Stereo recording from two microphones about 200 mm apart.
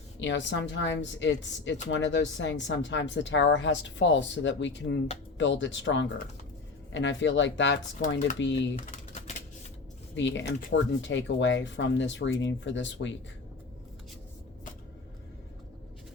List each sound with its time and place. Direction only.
0.2 s a woman's voice: 65° left (ahead or behind)
10.2 s a woman's voice: 65° left (ahead or behind)